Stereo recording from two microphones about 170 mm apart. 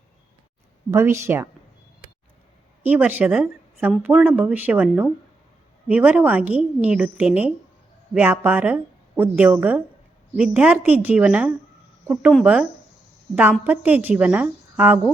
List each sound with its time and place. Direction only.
0.9 s a woman's voice: 15° right (ahead or behind)
2.8 s a woman's voice: 10° right (ahead or behind)
13.3 s a woman's voice: 10° right (ahead or behind)